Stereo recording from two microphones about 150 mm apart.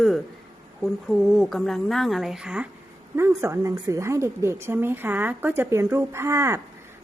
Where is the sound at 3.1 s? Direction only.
20° right (ahead or behind).